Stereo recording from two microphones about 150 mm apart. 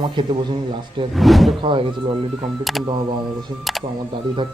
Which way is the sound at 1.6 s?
35° right (ahead or behind).